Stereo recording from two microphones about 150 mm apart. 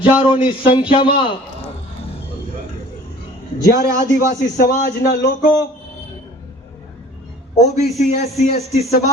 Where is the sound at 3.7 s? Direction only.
90° left.